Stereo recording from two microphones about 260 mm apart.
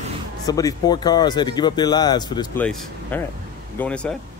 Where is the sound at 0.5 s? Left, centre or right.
Centre.